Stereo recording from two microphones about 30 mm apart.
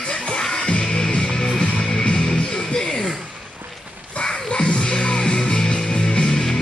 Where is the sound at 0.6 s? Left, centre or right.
Left.